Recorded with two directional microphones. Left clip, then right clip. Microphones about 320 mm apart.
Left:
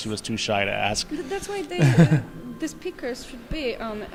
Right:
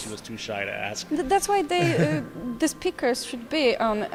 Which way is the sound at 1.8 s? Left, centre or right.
Left.